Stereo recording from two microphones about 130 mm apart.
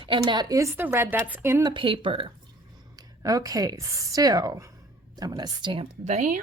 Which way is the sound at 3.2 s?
25° right (ahead or behind).